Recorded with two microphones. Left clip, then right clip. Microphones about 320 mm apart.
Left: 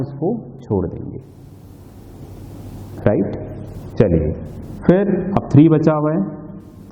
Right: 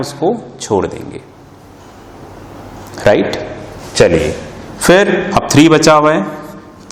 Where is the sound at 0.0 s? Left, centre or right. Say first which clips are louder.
Right 7 dB; centre.